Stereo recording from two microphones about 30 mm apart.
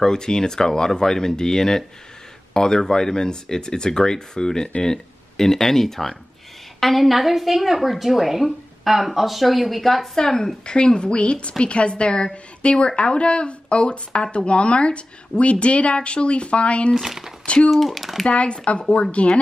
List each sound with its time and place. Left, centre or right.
0.0 s a woman's voice: left; by 10.0 s centre
10.1 s speech: centre; by 16.9 s left
16.9 s speech: centre
17.6 s a woman's voice: centre
18.2 s speech: left